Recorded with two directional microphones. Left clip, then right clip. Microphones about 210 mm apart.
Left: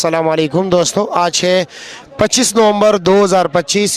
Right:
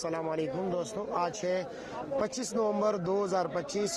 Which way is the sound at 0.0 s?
50° left (ahead or behind).